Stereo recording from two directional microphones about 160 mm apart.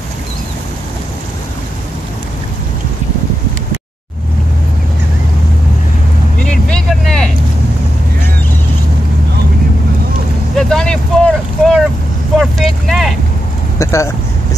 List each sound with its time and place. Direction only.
6.4 s vehicle: 5° left (ahead or behind)
10.5 s vehicle: centre (ahead or behind)
13.7 s vehicle: 20° left (ahead or behind)